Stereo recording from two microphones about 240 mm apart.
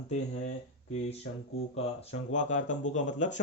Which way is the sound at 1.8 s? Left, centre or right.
Left.